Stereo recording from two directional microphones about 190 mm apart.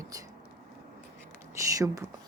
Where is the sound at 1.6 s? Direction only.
15° right (ahead or behind).